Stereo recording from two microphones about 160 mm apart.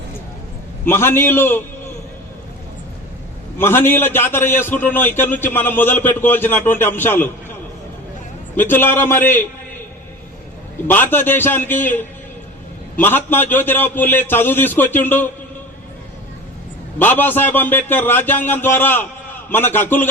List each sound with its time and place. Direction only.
0.9 s a man's voice: 15° left (ahead or behind)
3.6 s a man's voice: 15° left (ahead or behind)
8.5 s a man's voice: 15° left (ahead or behind)
10.8 s a man's voice: 10° left (ahead or behind)
17.0 s a man's voice: 10° left (ahead or behind)